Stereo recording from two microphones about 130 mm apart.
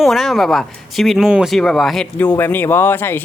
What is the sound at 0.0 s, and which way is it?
Speech, centre (ahead or behind).